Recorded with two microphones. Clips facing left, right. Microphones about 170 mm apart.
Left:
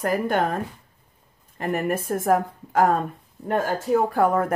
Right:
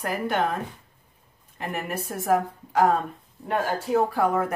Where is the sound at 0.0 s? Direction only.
45° left (ahead or behind).